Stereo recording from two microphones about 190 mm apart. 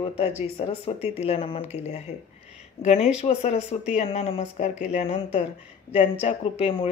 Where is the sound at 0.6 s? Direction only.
30° left (ahead or behind).